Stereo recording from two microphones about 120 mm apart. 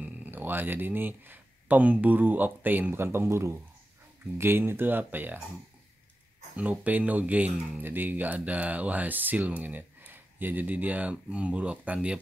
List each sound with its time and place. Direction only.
0.0 s speech: 15° right (ahead or behind)
6.5 s speech: 10° right (ahead or behind)